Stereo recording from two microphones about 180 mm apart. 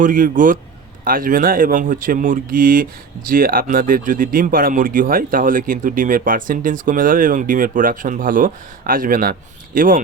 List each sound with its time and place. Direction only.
0.0 s speech: 45° right (ahead or behind)